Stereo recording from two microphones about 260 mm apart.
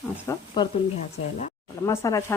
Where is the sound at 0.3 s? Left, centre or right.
Centre.